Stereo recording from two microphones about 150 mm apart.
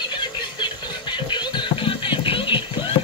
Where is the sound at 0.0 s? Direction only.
30° left (ahead or behind).